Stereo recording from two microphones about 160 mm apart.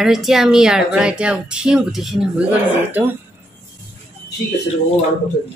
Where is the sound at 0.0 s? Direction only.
Centre (ahead or behind).